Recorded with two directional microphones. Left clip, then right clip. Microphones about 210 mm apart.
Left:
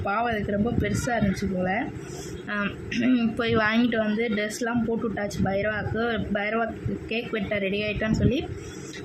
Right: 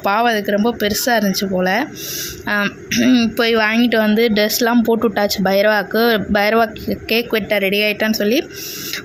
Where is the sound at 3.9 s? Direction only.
40° right (ahead or behind).